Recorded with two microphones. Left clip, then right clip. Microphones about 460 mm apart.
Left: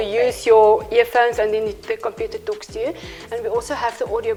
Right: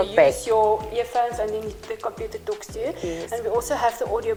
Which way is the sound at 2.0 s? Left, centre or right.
Left.